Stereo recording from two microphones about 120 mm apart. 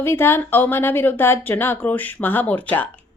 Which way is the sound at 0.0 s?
20° left (ahead or behind).